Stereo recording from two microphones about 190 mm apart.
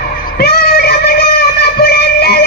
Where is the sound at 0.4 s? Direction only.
55° left (ahead or behind).